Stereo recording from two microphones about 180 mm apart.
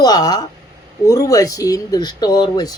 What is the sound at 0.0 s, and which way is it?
Speech, 20° left (ahead or behind).